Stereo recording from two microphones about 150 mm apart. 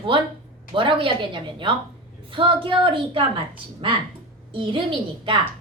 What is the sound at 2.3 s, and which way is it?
A woman's voice, 35° right (ahead or behind).